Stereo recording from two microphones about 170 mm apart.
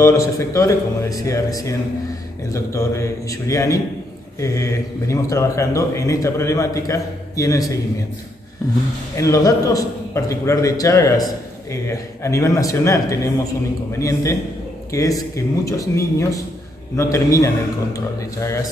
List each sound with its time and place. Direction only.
0.0 s speech: 20° left (ahead or behind)
9.1 s speech: 20° left (ahead or behind)